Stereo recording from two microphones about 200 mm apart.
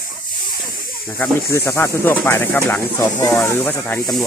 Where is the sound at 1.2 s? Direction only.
15° left (ahead or behind).